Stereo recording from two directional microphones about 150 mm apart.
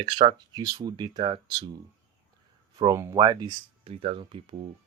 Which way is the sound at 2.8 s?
20° right (ahead or behind).